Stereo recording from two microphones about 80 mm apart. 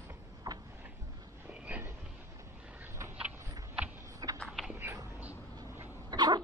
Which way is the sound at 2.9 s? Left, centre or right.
Right.